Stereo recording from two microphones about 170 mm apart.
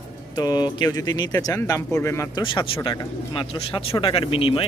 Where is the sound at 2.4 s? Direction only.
30° left (ahead or behind).